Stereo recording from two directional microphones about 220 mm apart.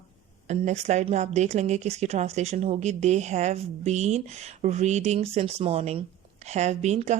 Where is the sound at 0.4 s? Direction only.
30° right (ahead or behind).